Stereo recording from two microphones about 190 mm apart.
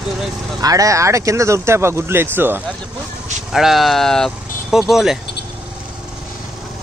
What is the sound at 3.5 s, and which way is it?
Speech, centre (ahead or behind).